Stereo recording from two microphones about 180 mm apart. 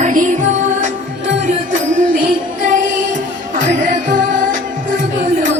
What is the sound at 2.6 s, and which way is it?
Music, 45° right (ahead or behind).